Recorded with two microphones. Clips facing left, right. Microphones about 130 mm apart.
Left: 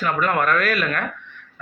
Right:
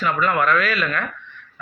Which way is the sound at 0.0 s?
50° left (ahead or behind).